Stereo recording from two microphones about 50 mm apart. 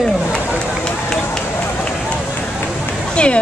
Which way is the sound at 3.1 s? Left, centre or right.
Left.